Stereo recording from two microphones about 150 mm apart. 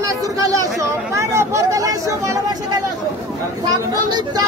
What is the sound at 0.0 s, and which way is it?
Chatter, 25° right (ahead or behind).